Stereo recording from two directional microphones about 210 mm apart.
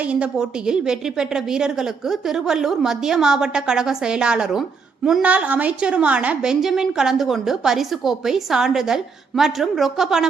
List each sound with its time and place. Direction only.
0.0 s a woman's voice: 5° right (ahead or behind)